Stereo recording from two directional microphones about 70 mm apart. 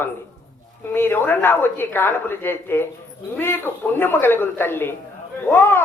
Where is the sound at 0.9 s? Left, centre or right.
Left.